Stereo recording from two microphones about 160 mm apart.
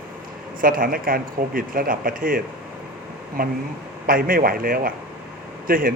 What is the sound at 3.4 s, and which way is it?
Speech, 65° right (ahead or behind).